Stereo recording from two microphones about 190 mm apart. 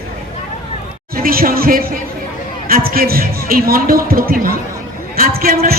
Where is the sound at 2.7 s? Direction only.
50° right (ahead or behind).